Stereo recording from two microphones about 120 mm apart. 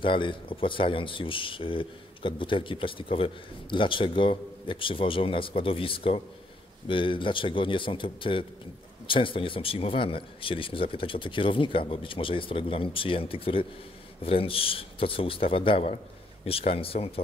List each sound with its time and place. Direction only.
0.0 s speech: 45° left (ahead or behind)